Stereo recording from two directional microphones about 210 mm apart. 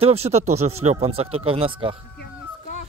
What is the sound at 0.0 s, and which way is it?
Speech, 30° right (ahead or behind).